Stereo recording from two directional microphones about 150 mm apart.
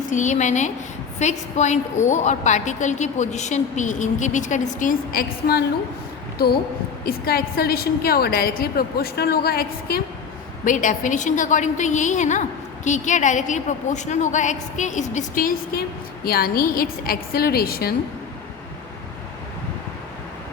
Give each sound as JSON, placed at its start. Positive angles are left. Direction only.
{"t": 0.1, "sound": "a woman's voice", "side_deg": 55}
{"t": 10.7, "sound": "a woman's voice", "side_deg": 60}